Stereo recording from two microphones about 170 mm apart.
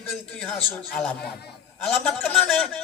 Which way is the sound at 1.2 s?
70° left (ahead or behind).